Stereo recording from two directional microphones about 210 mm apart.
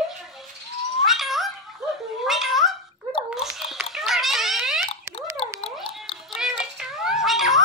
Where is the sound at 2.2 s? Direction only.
Centre (ahead or behind).